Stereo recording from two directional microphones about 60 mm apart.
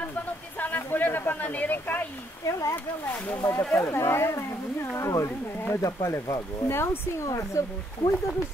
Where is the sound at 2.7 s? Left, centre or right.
Left.